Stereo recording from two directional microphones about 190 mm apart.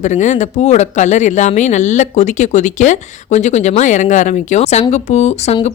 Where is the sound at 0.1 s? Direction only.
40° left (ahead or behind).